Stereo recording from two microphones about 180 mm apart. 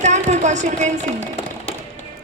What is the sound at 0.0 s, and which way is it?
A woman's voice, 40° right (ahead or behind).